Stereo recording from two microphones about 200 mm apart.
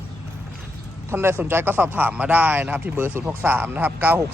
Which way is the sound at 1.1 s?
10° right (ahead or behind).